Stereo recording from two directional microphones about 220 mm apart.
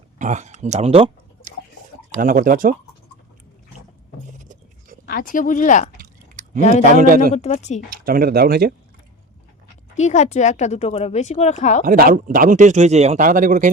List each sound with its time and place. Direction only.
0.2 s speech: 35° right (ahead or behind)
2.2 s speech: 40° right (ahead or behind)
4.3 s a sound: 35° right (ahead or behind)
5.0 s speech: 40° left (ahead or behind)
6.0 s chewing: 35° right (ahead or behind)
6.6 s speech: 30° left (ahead or behind)
7.0 s speech: 40° right (ahead or behind)
7.3 s speech: 30° left (ahead or behind)
8.0 s speech: 40° right (ahead or behind)
9.9 s speech: 30° left (ahead or behind)
11.9 s speech: 40° right (ahead or behind)